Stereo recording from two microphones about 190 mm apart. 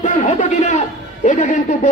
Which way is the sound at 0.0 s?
40° left (ahead or behind).